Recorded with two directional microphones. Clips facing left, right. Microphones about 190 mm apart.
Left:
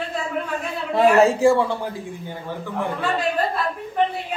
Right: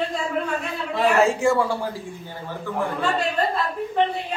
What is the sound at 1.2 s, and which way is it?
Speech, 35° left (ahead or behind).